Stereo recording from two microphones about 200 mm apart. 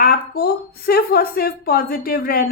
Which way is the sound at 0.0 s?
50° left (ahead or behind).